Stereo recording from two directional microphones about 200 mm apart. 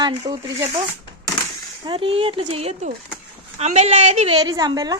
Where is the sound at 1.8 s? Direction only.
25° right (ahead or behind).